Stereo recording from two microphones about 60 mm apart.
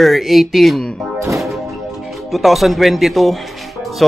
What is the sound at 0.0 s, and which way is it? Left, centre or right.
Speech, centre.